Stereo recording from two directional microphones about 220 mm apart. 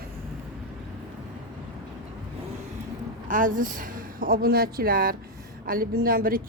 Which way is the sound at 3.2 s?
35° right (ahead or behind).